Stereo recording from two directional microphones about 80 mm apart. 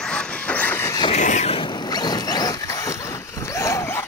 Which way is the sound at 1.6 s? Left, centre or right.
Left.